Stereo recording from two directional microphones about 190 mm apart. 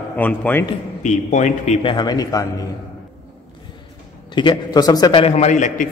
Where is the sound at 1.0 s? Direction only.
40° left (ahead or behind).